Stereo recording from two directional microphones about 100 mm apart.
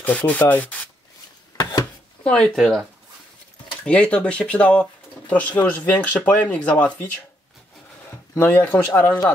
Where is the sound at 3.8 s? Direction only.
10° left (ahead or behind).